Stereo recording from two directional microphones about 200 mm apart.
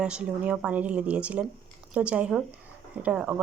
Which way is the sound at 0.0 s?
5° right (ahead or behind).